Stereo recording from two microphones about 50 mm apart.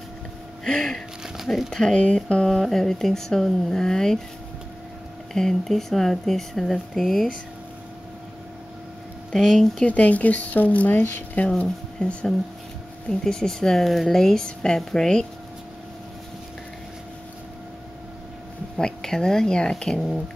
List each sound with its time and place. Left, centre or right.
0.7 s speech: centre
1.2 s crumpling: centre
1.7 s speech: centre
2.2 s a sound: centre
2.5 s speech: centre
5.3 s speech: centre
9.3 s speech: centre
9.8 s speech: left
11.4 s speech: centre
18.8 s speech: centre